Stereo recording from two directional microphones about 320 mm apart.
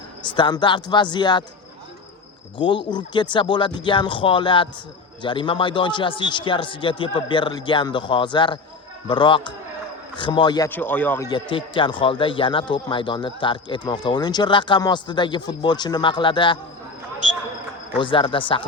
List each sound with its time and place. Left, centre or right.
0.3 s a man's voice: centre
2.6 s a man's voice: centre
17.9 s a man's voice: centre